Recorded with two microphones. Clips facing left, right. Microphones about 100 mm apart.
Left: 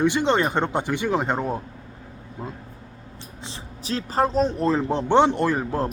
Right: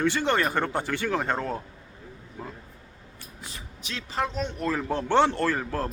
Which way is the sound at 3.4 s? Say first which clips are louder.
Left 6 dB; 30° left (ahead or behind).